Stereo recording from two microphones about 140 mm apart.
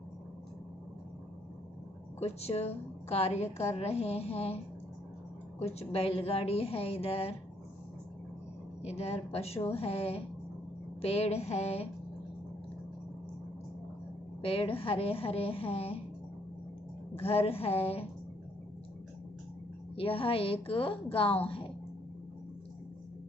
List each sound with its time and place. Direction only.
2.1 s a woman's voice: 50° left (ahead or behind)
8.8 s a woman's voice: 50° left (ahead or behind)
14.4 s a woman's voice: 40° left (ahead or behind)
17.2 s a woman's voice: 45° left (ahead or behind)
20.0 s a woman's voice: 40° left (ahead or behind)